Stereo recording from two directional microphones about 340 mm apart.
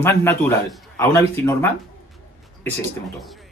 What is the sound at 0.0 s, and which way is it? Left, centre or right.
Speech, centre.